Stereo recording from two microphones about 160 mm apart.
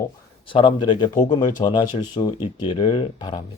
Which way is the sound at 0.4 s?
30° left (ahead or behind).